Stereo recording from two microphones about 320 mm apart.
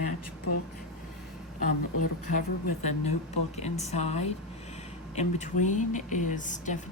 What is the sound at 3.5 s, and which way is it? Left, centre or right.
Speech, left.